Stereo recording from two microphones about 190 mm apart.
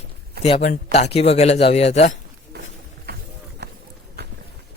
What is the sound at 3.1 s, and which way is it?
Run, 55° right (ahead or behind).